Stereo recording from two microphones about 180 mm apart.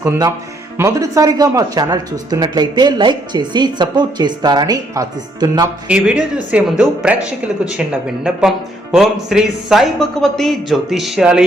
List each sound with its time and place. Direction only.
0.0 s speech: 15° right (ahead or behind)
5.9 s speech: 5° right (ahead or behind)